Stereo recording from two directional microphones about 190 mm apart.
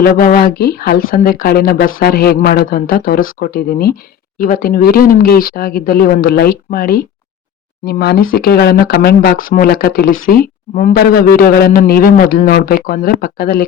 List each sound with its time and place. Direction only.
0.0 s speech: 45° left (ahead or behind)